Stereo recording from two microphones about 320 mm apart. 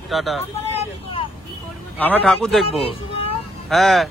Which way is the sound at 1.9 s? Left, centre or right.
Centre.